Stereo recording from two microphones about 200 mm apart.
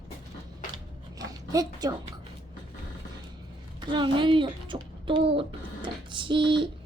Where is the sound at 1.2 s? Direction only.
20° right (ahead or behind).